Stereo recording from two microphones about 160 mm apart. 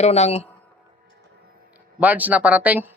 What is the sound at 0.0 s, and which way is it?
Speech, 45° left (ahead or behind).